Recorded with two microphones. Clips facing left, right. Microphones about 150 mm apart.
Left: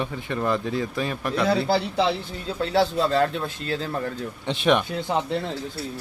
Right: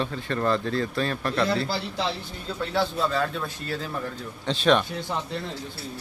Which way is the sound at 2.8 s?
35° left (ahead or behind).